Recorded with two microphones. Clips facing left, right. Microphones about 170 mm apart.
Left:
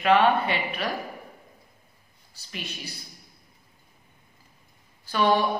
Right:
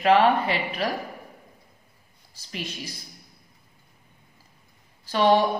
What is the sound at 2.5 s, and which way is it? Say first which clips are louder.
Speech: right 3 dB; 35° right (ahead or behind).